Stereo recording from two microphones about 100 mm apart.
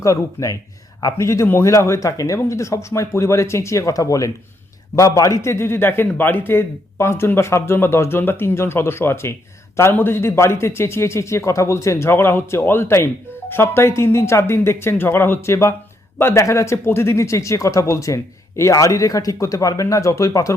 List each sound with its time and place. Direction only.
0.0 s a man's voice: 30° left (ahead or behind)